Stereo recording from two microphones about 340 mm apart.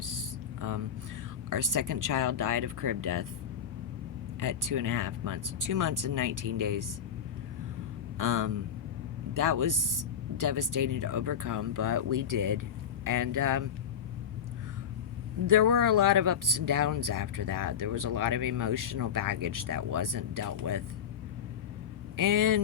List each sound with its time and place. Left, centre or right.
0.0 s a sound: right
1.5 s speech: right
4.4 s speech: right
8.2 s speech: right
15.4 s speech: right
22.1 s speech: right